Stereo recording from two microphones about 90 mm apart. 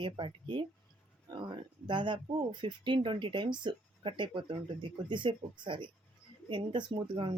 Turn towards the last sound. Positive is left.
turn(degrees=-65)  # may be behind; listen again after turning